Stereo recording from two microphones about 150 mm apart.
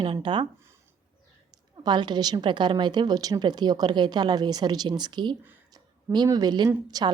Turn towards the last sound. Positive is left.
turn(degrees=-25)  # may be behind; listen again after turning